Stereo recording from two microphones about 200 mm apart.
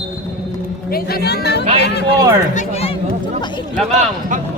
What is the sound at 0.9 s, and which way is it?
Speech, 50° left (ahead or behind).